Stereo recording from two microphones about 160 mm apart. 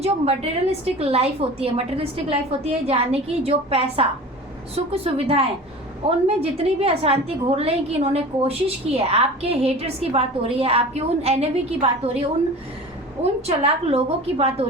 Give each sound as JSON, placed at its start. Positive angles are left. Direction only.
{"t": 0.0, "sound": "a woman's voice", "side_deg": -40}
{"t": 13.2, "sound": "a woman's voice", "side_deg": -40}